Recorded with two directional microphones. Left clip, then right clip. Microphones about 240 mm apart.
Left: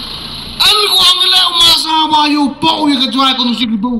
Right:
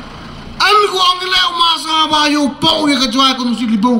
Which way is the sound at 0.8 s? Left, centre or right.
Right.